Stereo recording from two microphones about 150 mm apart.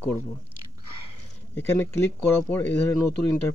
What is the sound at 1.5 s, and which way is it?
Speech, 15° left (ahead or behind).